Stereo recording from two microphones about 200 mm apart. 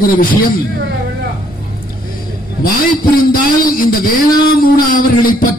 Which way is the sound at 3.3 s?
45° left (ahead or behind).